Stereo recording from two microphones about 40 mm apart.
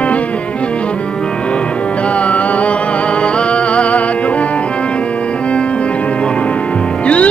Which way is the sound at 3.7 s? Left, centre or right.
Left.